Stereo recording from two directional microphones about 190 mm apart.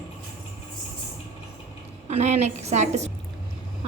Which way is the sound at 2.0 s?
35° right (ahead or behind).